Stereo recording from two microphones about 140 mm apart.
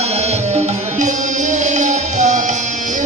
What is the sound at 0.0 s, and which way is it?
Music, 50° right (ahead or behind).